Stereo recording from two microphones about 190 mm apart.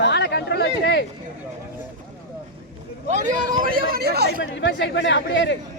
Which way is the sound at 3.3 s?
20° right (ahead or behind).